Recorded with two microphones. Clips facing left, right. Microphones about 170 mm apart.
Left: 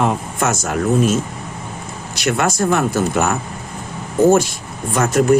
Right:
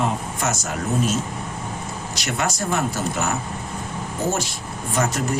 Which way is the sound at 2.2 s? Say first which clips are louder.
Left 8 dB; 55° left (ahead or behind).